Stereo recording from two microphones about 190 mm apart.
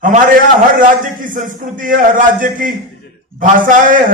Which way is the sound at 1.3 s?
45° right (ahead or behind).